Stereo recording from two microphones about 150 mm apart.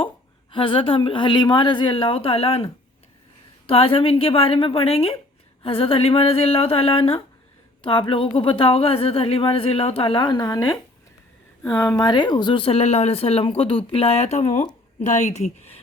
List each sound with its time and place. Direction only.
0.5 s speech: 35° left (ahead or behind)
3.7 s a woman's voice: 40° left (ahead or behind)